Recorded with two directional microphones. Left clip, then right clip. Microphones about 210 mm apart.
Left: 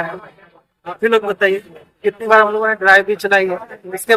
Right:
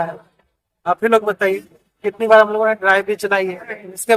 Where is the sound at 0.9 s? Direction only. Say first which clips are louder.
Right 1 dB; 20° right (ahead or behind).